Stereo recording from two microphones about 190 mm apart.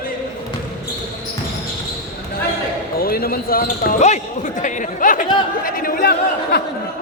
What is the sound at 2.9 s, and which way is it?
Speech, 50° left (ahead or behind).